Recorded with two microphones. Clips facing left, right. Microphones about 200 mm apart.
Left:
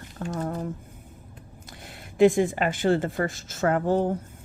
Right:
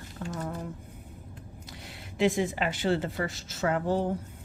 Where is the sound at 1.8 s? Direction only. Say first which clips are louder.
Left 8 dB; 50° left (ahead or behind).